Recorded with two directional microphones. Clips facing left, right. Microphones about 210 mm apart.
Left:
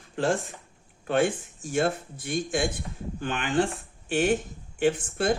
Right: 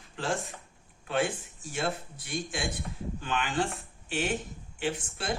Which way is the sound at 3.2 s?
55° left (ahead or behind).